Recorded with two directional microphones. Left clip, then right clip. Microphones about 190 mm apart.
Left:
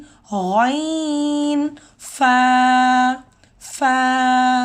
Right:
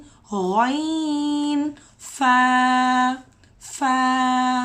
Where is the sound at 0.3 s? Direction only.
40° left (ahead or behind).